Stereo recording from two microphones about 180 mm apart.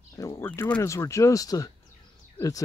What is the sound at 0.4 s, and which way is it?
Speech, 10° left (ahead or behind).